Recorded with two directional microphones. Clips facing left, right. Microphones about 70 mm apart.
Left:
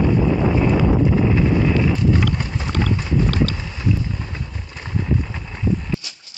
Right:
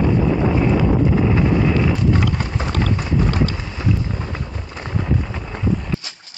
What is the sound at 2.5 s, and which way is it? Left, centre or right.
Boat, right.